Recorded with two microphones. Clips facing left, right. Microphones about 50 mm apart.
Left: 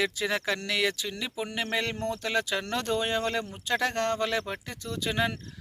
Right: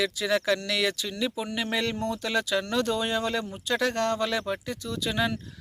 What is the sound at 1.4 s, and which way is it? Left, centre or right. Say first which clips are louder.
Speech: right 2 dB; left.